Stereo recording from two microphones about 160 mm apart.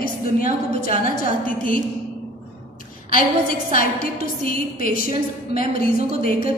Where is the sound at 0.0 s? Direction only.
60° left (ahead or behind).